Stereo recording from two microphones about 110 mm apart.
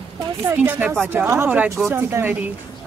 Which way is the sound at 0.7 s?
15° right (ahead or behind).